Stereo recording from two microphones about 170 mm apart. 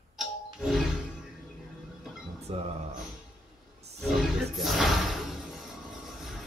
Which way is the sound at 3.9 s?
Centre (ahead or behind).